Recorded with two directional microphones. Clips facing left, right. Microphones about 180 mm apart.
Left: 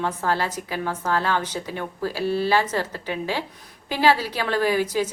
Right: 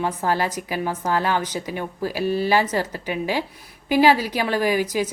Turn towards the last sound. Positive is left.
turn(degrees=-10)  # may be behind; listen again after turning